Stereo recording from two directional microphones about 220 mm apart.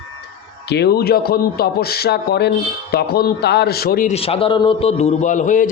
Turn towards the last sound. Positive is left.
turn(degrees=35)  # may be behind; listen again after turning